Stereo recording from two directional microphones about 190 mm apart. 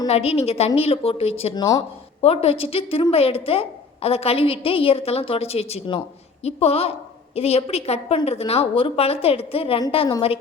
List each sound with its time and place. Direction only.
0.1 s a woman's voice: 30° left (ahead or behind)